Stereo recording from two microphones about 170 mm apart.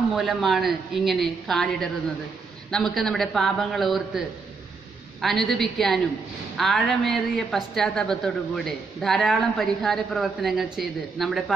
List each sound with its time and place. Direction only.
0.1 s a woman's voice: centre (ahead or behind)
5.2 s a woman's voice: centre (ahead or behind)